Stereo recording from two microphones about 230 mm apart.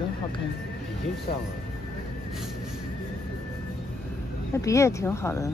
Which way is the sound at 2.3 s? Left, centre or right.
Centre.